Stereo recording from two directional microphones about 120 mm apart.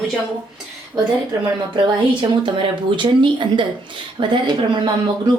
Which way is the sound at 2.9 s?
40° right (ahead or behind).